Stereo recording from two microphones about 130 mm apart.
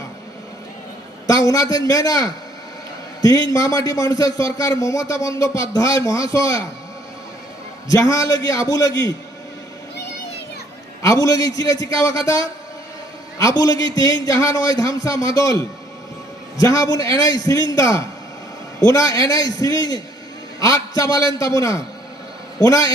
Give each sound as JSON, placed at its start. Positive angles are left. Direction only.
{"t": 1.3, "sound": "a man's voice", "side_deg": 25}
{"t": 7.9, "sound": "a man's voice", "side_deg": 25}
{"t": 11.0, "sound": "a man's voice", "side_deg": 25}
{"t": 13.4, "sound": "a man's voice", "side_deg": 25}